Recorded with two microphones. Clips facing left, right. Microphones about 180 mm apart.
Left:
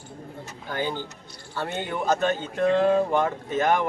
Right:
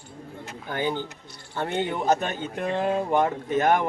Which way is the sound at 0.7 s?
15° right (ahead or behind).